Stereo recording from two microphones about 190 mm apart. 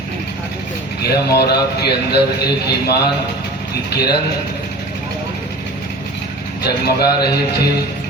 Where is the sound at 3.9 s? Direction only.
55° left (ahead or behind).